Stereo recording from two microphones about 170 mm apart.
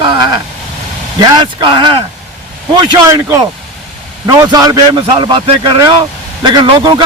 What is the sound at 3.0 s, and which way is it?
A man's voice, 20° right (ahead or behind).